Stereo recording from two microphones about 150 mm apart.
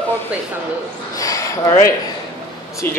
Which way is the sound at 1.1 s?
20° left (ahead or behind).